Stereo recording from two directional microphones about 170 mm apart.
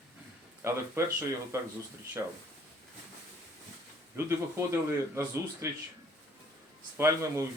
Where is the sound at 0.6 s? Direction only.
15° right (ahead or behind).